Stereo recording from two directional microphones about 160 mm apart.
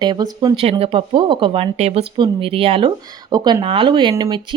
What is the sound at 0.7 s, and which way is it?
A woman's voice, 35° right (ahead or behind).